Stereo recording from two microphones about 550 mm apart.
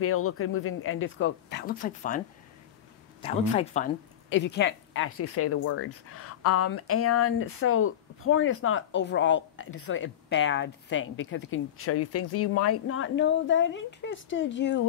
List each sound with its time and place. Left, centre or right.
0.0 s a woman's voice: left